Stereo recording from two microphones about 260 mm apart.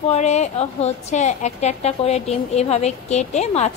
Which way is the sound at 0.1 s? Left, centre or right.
Left.